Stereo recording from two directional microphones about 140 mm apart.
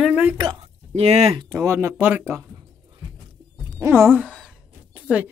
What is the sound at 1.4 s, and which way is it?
Speech, 25° right (ahead or behind).